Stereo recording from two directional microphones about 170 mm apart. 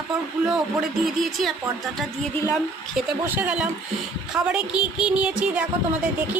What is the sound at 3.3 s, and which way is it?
A woman's voice, 5° right (ahead or behind).